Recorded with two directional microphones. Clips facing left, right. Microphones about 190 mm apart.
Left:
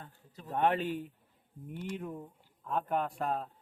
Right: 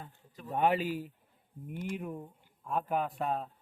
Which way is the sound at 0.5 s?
10° right (ahead or behind).